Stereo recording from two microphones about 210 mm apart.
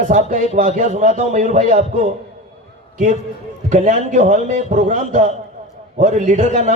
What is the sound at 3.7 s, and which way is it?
A man's voice, 35° right (ahead or behind).